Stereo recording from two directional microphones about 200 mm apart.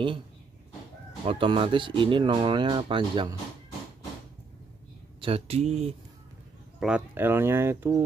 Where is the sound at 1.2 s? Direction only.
25° right (ahead or behind).